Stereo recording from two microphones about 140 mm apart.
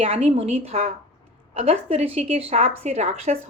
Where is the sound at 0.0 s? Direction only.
45° right (ahead or behind).